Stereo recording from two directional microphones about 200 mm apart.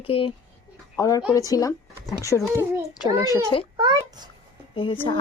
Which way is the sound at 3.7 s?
20° right (ahead or behind).